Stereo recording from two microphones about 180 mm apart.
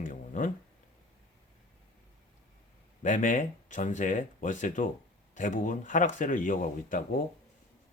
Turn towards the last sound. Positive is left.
turn(degrees=50)  # may be behind; listen again after turning